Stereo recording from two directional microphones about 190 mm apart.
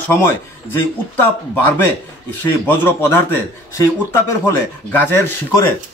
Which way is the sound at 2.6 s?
10° left (ahead or behind).